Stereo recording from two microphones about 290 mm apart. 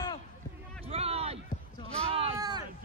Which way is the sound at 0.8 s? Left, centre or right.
Right.